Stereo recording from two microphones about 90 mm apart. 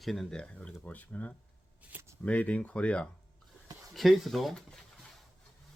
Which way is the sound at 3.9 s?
Centre (ahead or behind).